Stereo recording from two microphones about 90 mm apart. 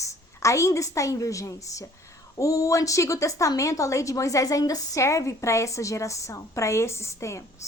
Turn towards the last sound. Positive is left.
turn(degrees=35)  # may be behind; listen again after turning